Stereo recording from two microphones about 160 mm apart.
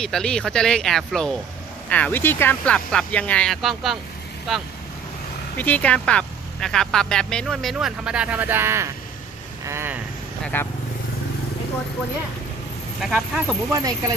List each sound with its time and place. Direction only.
0.0 s speech: 5° left (ahead or behind)
5.5 s speech: 10° left (ahead or behind); by 10.0 s 15° right (ahead or behind)
10.4 s speech: 10° left (ahead or behind)
13.0 s speech: 5° right (ahead or behind)
13.7 s speech: 25° right (ahead or behind)